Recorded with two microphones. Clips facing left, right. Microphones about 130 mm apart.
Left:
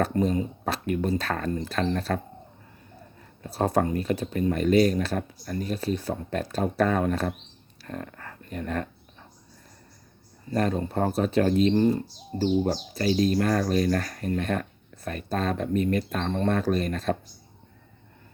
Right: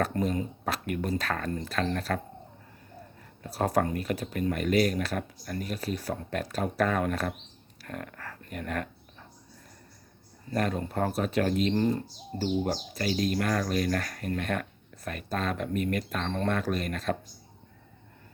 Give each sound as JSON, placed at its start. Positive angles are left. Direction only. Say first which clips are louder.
{"t": 0.0, "sound": "speech", "louder": "left 4 dB", "side_deg": 30}
{"t": 3.4, "sound": "speech", "louder": "left 3 dB", "side_deg": 25}
{"t": 10.5, "sound": "speech", "louder": "left 4 dB", "side_deg": 30}